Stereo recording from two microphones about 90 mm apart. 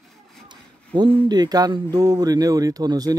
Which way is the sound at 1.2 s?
50° right (ahead or behind).